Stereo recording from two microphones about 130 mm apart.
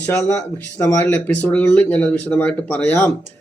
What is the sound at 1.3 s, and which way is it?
Speech, 10° left (ahead or behind).